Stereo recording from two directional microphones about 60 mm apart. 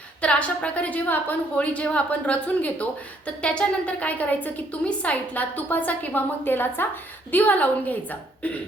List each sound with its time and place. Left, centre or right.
0.2 s a woman's voice: left